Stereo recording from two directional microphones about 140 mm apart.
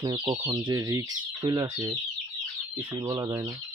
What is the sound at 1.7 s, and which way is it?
Speech, 15° right (ahead or behind).